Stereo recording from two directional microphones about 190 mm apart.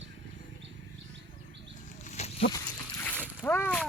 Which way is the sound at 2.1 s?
35° left (ahead or behind).